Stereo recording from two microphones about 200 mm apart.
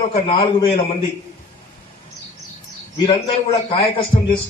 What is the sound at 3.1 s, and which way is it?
A man's voice, 25° left (ahead or behind).